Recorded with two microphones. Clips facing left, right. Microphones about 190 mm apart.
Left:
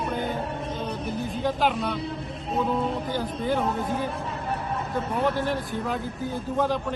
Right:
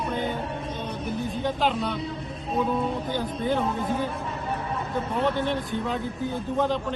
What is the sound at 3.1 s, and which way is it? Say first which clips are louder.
Speech: right 1 dB; 5° left (ahead or behind).